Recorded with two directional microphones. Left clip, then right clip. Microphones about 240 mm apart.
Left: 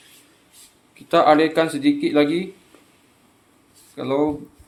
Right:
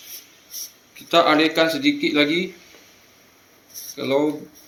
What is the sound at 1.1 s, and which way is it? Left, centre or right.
Speech, left.